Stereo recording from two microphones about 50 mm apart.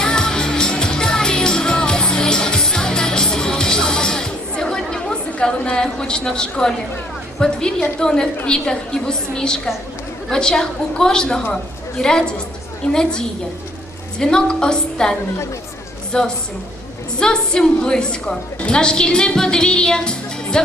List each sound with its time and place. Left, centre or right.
0.0 s music: centre
7.3 s a woman's voice: centre
16.1 s a woman's voice: centre